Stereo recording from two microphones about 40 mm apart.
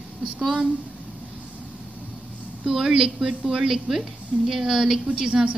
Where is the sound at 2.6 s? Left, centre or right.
Centre.